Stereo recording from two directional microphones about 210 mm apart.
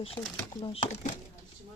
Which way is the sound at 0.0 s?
25° left (ahead or behind).